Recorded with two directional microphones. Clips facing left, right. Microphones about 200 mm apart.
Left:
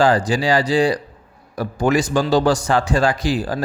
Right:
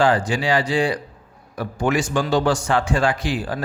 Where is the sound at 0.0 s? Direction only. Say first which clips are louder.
Left 2 dB; 40° left (ahead or behind).